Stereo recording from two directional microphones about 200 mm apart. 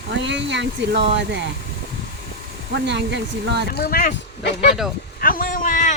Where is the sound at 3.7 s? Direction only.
50° left (ahead or behind).